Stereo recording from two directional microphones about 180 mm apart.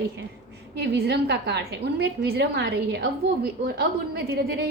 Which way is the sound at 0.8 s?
70° right (ahead or behind).